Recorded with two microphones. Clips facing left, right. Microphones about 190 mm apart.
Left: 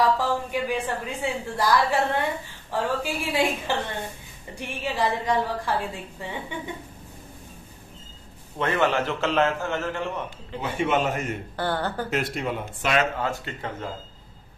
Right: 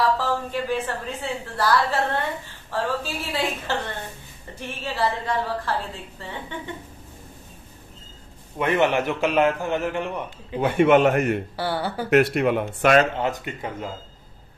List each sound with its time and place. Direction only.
0.2 s a woman's voice: 15° left (ahead or behind)
8.5 s a man's voice: 15° right (ahead or behind)
10.6 s a man's voice: 60° right (ahead or behind)
11.5 s a man's voice: 10° right (ahead or behind)
12.1 s speech: 65° right (ahead or behind)
13.2 s a man's voice: 20° right (ahead or behind)